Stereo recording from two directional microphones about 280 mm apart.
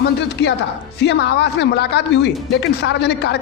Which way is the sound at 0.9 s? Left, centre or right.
Left.